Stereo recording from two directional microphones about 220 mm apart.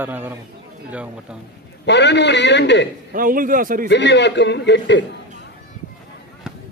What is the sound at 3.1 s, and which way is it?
Speech, 40° right (ahead or behind).